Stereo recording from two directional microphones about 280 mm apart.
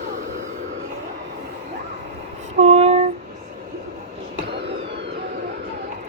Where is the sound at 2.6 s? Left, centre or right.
Right.